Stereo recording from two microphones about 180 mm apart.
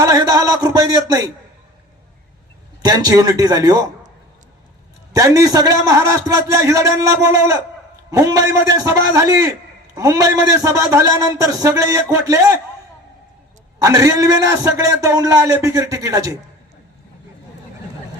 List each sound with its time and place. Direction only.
0.0 s a man's voice: 20° right (ahead or behind)
2.8 s a man's voice: 20° right (ahead or behind)
5.1 s a man's voice: 20° right (ahead or behind)
13.8 s a man's voice: 20° right (ahead or behind)